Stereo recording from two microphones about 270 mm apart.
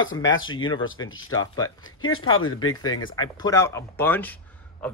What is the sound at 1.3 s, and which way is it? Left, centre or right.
Speech, centre.